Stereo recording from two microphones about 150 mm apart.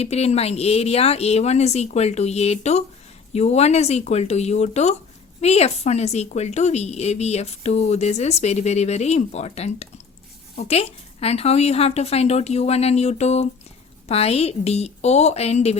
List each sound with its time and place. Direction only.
0.0 s speech: 45° left (ahead or behind)